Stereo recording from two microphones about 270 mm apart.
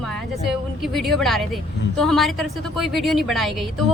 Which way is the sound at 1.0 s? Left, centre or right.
Centre.